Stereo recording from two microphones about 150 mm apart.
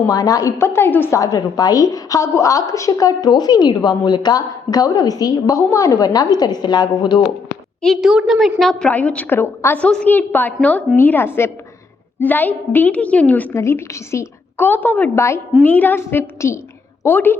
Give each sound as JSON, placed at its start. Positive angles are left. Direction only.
{"t": 0.1, "sound": "a woman's voice", "side_deg": 25}
{"t": 7.8, "sound": "a woman's voice", "side_deg": 0}